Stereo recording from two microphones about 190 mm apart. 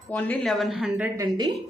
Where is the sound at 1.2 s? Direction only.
20° right (ahead or behind).